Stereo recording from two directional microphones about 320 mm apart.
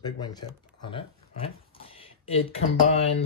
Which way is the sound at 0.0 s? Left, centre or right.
Centre.